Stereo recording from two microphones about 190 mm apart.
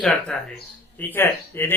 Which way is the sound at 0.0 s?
Centre (ahead or behind).